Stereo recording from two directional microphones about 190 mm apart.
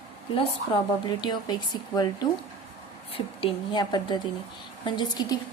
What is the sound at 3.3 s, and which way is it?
A woman's voice, 25° left (ahead or behind).